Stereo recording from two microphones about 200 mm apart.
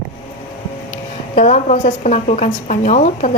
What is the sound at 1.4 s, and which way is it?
A woman's voice, 35° left (ahead or behind).